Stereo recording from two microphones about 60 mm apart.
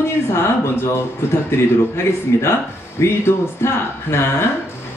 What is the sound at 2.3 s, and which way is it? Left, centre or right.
Speech, left.